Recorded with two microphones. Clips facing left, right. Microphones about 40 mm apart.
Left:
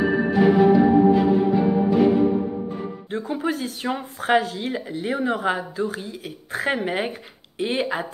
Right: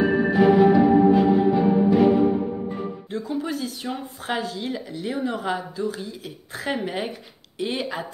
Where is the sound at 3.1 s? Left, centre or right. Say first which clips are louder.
Left 4 dB; left.